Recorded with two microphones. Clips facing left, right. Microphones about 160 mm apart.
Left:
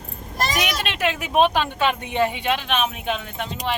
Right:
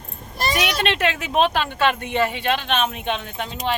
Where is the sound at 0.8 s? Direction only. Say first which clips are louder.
Right 3 dB; 5° left (ahead or behind).